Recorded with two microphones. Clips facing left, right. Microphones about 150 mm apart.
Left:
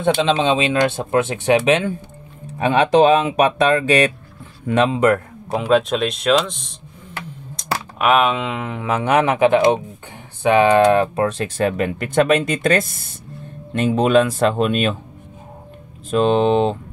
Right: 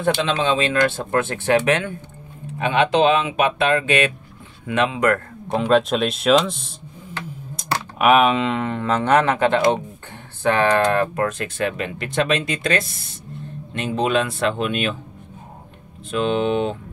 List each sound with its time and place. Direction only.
0.2 s speech: 20° left (ahead or behind)
2.6 s speech: 40° left (ahead or behind)
5.5 s speech: 5° left (ahead or behind); by 11.4 s 20° left (ahead or behind)
11.5 s speech: 45° left (ahead or behind)
16.1 s speech: 40° left (ahead or behind)